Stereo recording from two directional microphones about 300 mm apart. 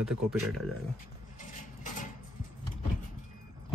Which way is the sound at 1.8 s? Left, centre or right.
Left.